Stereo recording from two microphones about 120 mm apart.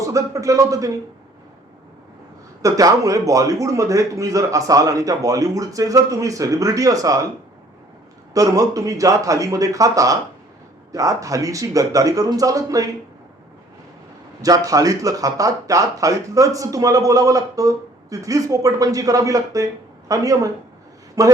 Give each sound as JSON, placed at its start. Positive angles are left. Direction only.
{"t": 0.0, "sound": "speech", "side_deg": -25}
{"t": 2.6, "sound": "speech", "side_deg": -30}
{"t": 8.3, "sound": "speech", "side_deg": -30}
{"t": 14.4, "sound": "speech", "side_deg": -30}